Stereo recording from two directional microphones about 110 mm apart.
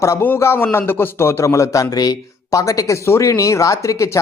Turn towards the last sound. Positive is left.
turn(degrees=30)  # may be behind; listen again after turning